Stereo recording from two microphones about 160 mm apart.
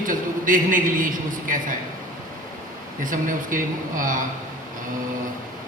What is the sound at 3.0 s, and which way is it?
A man's voice, 55° right (ahead or behind).